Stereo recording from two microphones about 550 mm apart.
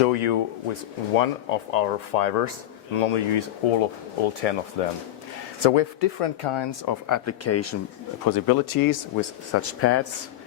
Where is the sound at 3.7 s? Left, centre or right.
Left.